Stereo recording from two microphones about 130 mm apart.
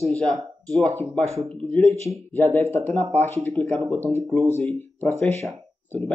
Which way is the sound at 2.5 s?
15° left (ahead or behind).